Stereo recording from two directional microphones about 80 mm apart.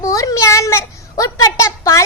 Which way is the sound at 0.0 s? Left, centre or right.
Left.